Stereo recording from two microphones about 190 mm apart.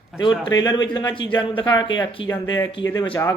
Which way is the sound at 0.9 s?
25° left (ahead or behind).